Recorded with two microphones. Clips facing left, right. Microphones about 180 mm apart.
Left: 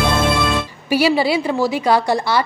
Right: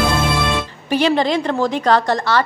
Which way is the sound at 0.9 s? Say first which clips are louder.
Even; 10° left (ahead or behind).